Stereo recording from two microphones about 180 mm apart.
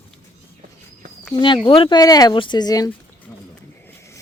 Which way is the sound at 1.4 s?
25° left (ahead or behind).